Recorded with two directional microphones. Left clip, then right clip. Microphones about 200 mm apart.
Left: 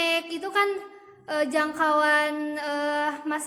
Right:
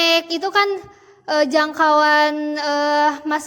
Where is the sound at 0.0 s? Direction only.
40° right (ahead or behind).